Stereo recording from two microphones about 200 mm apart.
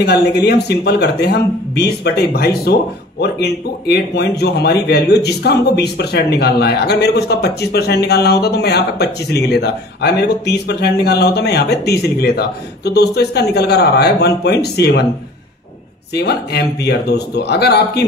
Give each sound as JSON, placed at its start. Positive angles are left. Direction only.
{"t": 0.0, "sound": "speech", "side_deg": 55}
{"t": 16.1, "sound": "speech", "side_deg": 55}